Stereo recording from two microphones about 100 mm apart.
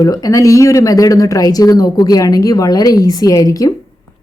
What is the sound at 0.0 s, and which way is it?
Speech, 35° left (ahead or behind).